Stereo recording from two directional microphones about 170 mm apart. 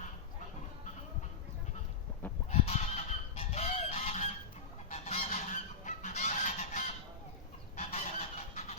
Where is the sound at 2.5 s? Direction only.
40° left (ahead or behind).